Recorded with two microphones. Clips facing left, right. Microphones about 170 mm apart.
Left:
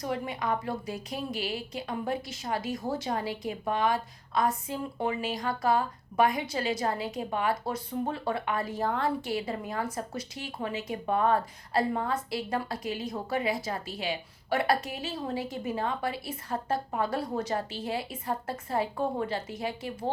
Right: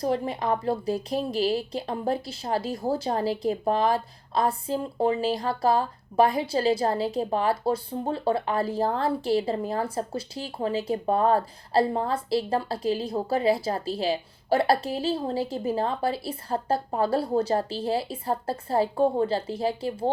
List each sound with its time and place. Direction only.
0.0 s a woman's voice: 35° right (ahead or behind)